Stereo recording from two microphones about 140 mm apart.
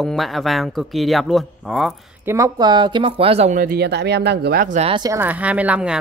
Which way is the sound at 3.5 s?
75° right (ahead or behind).